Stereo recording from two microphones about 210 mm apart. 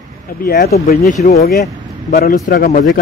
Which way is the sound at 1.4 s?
45° left (ahead or behind).